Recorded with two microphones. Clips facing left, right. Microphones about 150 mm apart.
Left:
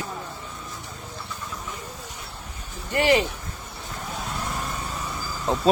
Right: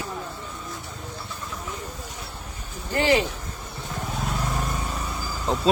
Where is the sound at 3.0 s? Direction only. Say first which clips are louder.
Left 1 dB; 15° left (ahead or behind).